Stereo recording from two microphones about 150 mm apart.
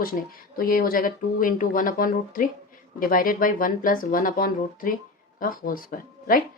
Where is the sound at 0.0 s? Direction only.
75° left (ahead or behind).